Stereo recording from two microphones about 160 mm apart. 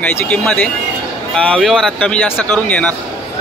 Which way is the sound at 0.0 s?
10° left (ahead or behind).